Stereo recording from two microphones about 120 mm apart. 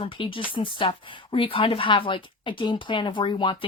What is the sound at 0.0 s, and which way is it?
Speech, 45° left (ahead or behind).